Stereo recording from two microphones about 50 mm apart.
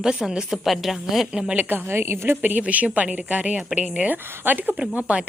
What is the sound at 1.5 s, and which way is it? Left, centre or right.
Speech, right.